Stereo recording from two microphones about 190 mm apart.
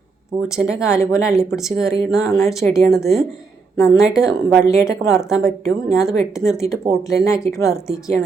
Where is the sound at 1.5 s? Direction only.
Centre (ahead or behind).